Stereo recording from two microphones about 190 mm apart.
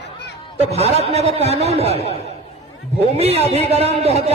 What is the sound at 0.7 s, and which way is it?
Speech, 35° right (ahead or behind).